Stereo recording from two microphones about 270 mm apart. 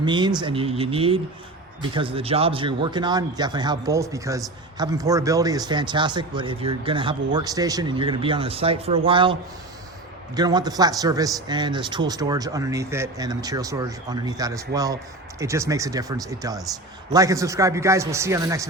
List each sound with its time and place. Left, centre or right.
0.0 s a man's voice: centre